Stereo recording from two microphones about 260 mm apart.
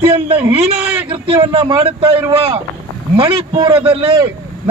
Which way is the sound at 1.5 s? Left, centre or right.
Centre.